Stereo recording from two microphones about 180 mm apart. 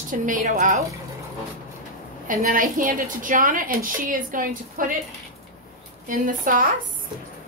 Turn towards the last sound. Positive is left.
turn(degrees=-50)  # may be behind; listen again after turning